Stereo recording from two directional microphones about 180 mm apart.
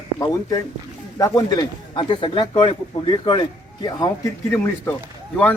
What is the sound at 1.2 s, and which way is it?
A man's voice, 20° left (ahead or behind).